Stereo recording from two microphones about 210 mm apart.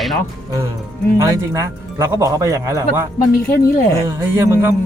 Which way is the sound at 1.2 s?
15° right (ahead or behind).